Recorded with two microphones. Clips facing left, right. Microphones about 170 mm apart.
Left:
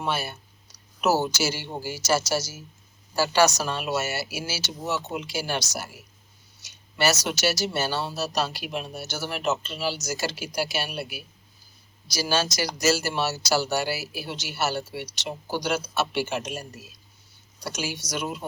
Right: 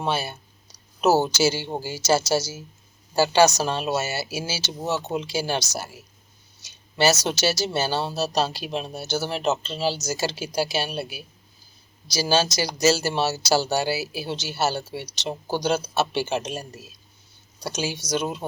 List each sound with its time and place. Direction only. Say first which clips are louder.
0.0 s speech: right 3 dB; 30° right (ahead or behind)
6.9 s speech: right 3 dB; 30° right (ahead or behind)